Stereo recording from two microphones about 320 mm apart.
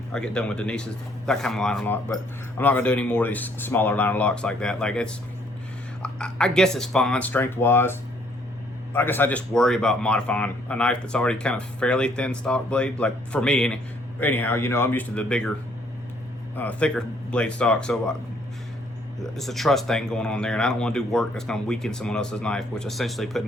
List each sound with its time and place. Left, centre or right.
0.1 s speech: centre
16.6 s speech: centre
19.2 s speech: centre